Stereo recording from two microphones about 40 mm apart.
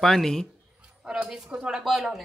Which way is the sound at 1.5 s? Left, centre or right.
Right.